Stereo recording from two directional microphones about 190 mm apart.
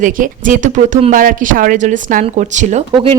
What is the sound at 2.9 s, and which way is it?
Speech, 30° right (ahead or behind).